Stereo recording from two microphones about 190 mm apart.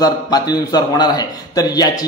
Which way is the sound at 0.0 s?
20° left (ahead or behind).